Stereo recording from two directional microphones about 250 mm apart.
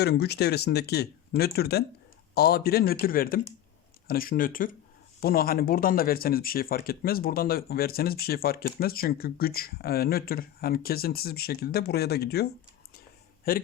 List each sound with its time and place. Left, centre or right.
0.0 s speech: left
13.5 s speech: left